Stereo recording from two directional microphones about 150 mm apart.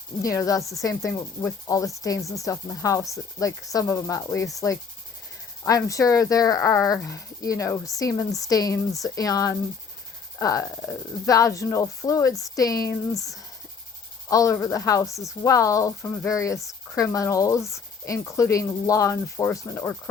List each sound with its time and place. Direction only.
0.2 s speech: 20° left (ahead or behind)